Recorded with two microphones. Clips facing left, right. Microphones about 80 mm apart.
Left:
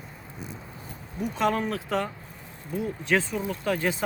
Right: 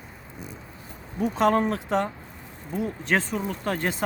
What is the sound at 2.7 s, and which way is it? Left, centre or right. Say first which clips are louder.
Speech: even; right.